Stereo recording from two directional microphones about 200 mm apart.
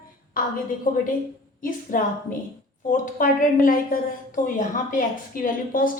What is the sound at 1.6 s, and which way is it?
A woman's voice, 45° left (ahead or behind).